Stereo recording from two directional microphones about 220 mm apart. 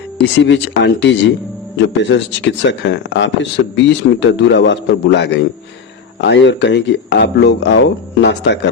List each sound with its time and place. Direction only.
0.2 s speech: 55° left (ahead or behind)